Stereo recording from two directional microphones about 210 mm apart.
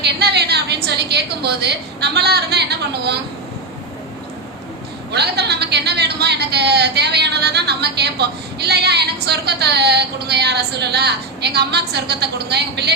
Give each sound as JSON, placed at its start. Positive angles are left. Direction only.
{"t": 0.0, "sound": "a woman's voice", "side_deg": -50}
{"t": 5.1, "sound": "speech", "side_deg": -50}